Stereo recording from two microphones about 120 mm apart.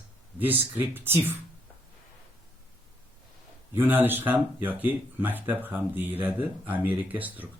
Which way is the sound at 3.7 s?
20° right (ahead or behind).